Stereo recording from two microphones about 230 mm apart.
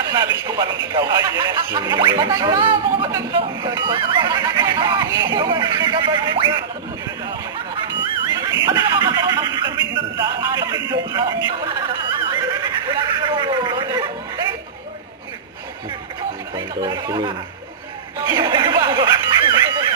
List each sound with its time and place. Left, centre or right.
0.0 s speech: centre
8.3 s a sound: centre
8.6 s music: centre
9.9 s a sound: centre
10.8 s music: centre
12.3 s snicker: centre
16.6 s speech: centre
18.2 s snicker: centre